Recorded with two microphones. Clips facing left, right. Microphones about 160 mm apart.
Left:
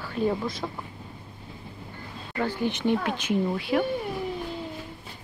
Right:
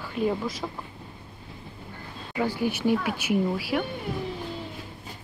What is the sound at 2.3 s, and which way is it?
Speech, 10° right (ahead or behind).